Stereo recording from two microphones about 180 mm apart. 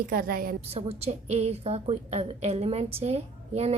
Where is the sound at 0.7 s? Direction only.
35° right (ahead or behind).